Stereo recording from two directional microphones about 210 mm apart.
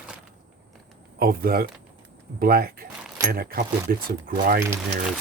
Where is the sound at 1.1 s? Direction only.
45° right (ahead or behind).